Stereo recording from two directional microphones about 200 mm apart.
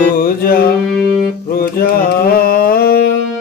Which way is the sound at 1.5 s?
50° left (ahead or behind).